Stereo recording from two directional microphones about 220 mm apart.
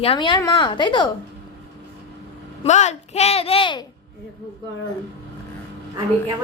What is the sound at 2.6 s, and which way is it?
A woman's voice, 30° left (ahead or behind).